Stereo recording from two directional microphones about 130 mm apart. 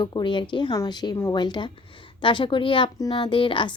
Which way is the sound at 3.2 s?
40° left (ahead or behind).